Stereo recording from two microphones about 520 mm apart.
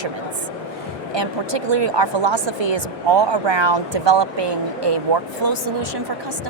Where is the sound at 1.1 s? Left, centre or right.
Right.